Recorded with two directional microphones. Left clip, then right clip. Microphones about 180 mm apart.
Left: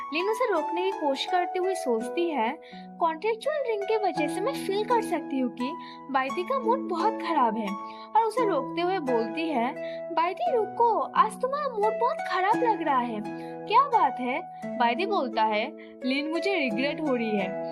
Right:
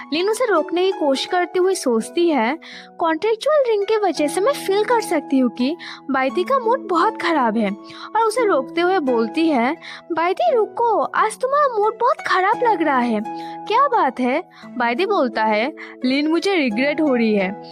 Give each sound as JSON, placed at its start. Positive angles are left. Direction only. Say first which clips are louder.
{"t": 0.1, "sound": "speech", "louder": "right 8 dB", "side_deg": -45}